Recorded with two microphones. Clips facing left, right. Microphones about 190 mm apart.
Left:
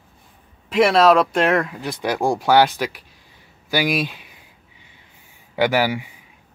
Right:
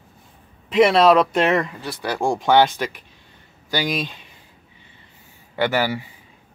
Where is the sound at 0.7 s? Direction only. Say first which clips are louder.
Even; 5° left (ahead or behind).